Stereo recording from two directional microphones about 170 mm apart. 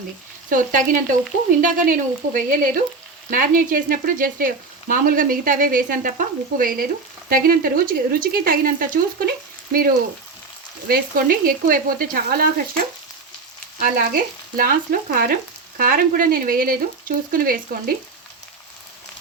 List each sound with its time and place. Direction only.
0.5 s speech: 50° right (ahead or behind)
3.2 s frying: 55° right (ahead or behind)